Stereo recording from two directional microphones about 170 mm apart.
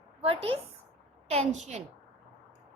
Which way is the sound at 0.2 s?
35° right (ahead or behind).